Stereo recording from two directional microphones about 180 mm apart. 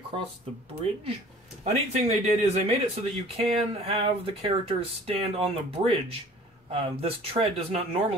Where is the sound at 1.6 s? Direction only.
35° right (ahead or behind).